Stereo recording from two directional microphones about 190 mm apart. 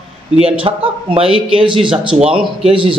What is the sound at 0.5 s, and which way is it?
Speech, 30° right (ahead or behind).